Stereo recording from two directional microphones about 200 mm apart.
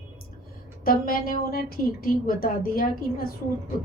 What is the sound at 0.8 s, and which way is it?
A woman's voice, 45° left (ahead or behind).